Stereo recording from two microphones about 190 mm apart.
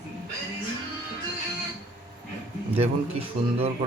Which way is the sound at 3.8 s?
30° right (ahead or behind).